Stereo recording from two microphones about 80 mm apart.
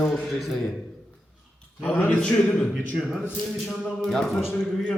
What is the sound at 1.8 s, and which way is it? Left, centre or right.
Speech, left.